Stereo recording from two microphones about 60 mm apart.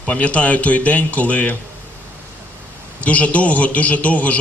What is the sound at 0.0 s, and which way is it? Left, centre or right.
A man's voice, left.